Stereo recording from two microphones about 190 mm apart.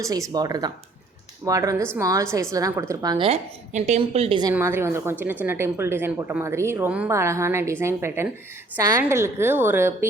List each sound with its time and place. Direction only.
0.0 s a woman's voice: 20° right (ahead or behind)
4.5 s speech: 15° right (ahead or behind)